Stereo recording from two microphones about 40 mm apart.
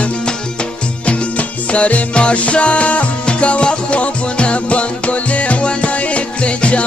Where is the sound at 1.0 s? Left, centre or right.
Left.